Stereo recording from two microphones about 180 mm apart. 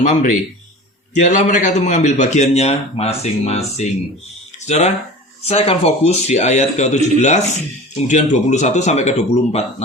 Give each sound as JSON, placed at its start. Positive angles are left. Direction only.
{"t": 0.0, "sound": "a man's voice", "side_deg": 45}